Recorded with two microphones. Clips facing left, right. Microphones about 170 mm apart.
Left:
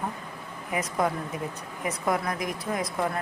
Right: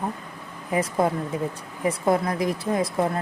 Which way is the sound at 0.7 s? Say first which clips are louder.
Right 5 dB; 30° right (ahead or behind).